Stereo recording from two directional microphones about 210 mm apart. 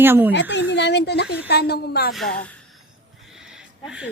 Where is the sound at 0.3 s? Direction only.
55° left (ahead or behind).